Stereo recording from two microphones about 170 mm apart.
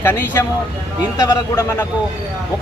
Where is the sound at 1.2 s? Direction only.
25° left (ahead or behind).